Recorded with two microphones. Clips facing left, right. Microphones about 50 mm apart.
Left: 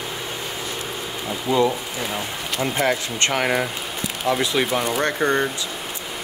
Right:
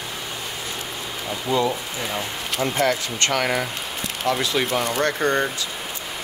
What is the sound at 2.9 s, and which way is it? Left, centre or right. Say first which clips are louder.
Speech: left 1 dB; left.